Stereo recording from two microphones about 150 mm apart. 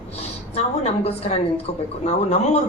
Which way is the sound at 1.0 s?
45° left (ahead or behind).